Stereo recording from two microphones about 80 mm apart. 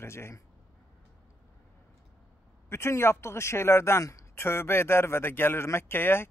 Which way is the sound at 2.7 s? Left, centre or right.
Left.